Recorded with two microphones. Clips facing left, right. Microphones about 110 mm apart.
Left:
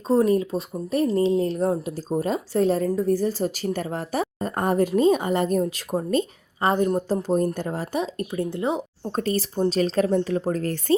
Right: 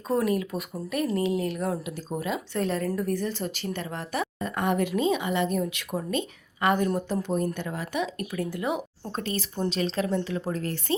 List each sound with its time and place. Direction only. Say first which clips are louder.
0.1 s speech: left 6 dB; 30° left (ahead or behind)
9.1 s speech: left 7 dB; 40° left (ahead or behind)